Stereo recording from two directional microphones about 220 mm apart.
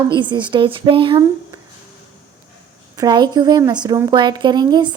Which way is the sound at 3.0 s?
20° right (ahead or behind).